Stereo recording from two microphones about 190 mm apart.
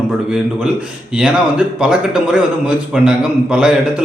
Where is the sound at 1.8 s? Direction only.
5° right (ahead or behind).